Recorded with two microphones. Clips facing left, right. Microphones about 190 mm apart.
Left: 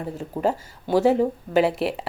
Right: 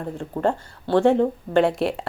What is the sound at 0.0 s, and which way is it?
A woman's voice, 5° left (ahead or behind).